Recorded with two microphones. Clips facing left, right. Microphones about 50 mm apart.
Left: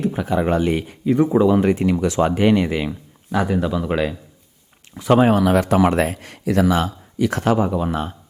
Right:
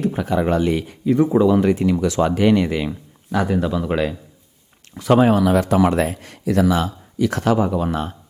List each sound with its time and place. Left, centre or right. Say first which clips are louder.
0.1 s speech: even; centre
1.6 s speech: even; left; by 5.3 s centre
5.3 s speech: even; left
7.5 s speech: even; centre